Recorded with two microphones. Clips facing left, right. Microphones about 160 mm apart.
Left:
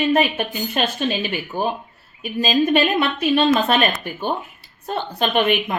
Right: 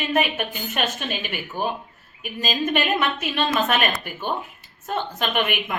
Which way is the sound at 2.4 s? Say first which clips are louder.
Left 6 dB; 35° left (ahead or behind).